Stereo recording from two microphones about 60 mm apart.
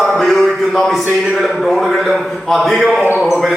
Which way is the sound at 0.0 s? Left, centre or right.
Centre.